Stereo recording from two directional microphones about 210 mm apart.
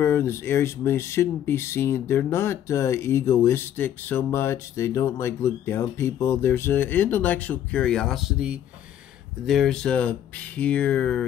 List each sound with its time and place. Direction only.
0.0 s speech: 10° left (ahead or behind)